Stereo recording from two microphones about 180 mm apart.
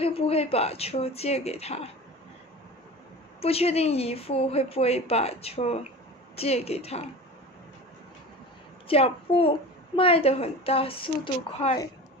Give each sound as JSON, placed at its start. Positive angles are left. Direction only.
{"t": 0.0, "sound": "a woman's voice", "side_deg": 35}
{"t": 3.3, "sound": "a woman's voice", "side_deg": 35}
{"t": 8.8, "sound": "a woman's voice", "side_deg": 30}